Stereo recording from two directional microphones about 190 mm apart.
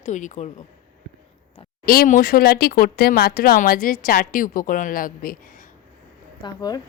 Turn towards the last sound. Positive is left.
turn(degrees=20)  # may be behind; listen again after turning